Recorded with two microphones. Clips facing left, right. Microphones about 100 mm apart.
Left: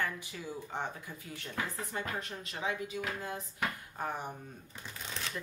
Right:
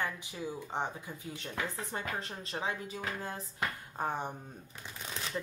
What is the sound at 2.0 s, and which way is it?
Speech, 30° right (ahead or behind).